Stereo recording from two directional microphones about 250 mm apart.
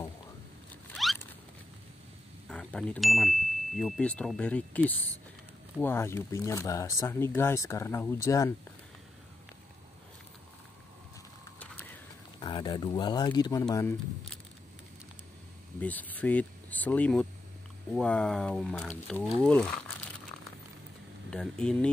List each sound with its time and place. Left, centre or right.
0.9 s rodents: centre
2.5 s speech: centre
11.6 s a sound: centre
12.4 s speech: centre
15.8 s speech: centre
21.3 s speech: centre